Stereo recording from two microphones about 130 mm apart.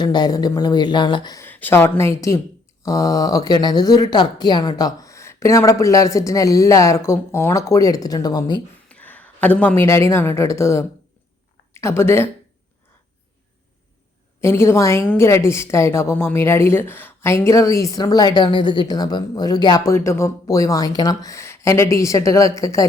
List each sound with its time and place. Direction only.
0.0 s speech: 30° left (ahead or behind)
1.4 s a woman's voice: 15° left (ahead or behind); by 8.6 s 30° left (ahead or behind)
8.9 s a woman's voice: 10° left (ahead or behind)
14.4 s a woman's voice: 20° left (ahead or behind)